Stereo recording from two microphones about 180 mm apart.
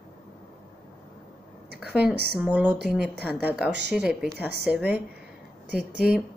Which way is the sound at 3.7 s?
70° right (ahead or behind).